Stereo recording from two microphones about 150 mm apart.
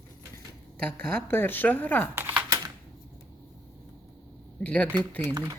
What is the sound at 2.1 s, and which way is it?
Typewriter, 15° right (ahead or behind).